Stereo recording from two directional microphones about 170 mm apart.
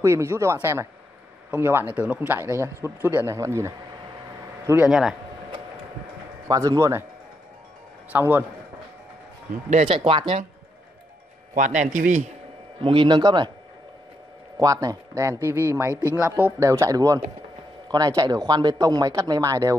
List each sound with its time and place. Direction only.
0.0 s speech: 15° right (ahead or behind)
4.6 s speech: 5° right (ahead or behind)
6.4 s speech: 20° right (ahead or behind)
8.1 s speech: 10° right (ahead or behind)
9.7 s speech: 35° right (ahead or behind)
11.5 s a man's voice: 45° right (ahead or behind)
12.8 s speech: 30° right (ahead or behind)
14.6 s speech: 20° right (ahead or behind)
15.9 s speech: 15° left (ahead or behind)
16.2 s speech: 10° right (ahead or behind)